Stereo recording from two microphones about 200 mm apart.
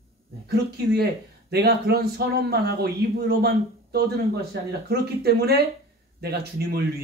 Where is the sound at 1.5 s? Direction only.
50° right (ahead or behind).